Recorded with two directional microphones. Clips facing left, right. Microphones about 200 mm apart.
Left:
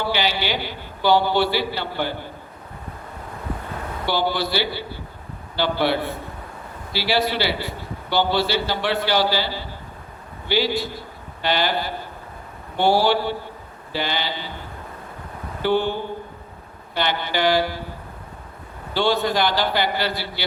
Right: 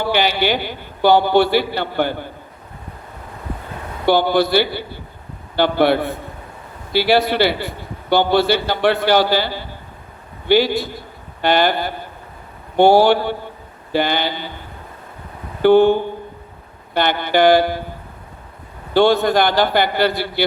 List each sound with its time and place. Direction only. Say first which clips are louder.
0.1 s a man's voice: right 6 dB; 55° right (ahead or behind)
4.0 s a man's voice: right 8 dB; 55° right (ahead or behind)
15.6 s a man's voice: right 10 dB; 55° right (ahead or behind)
18.9 s a man's voice: right 7 dB; 55° right (ahead or behind)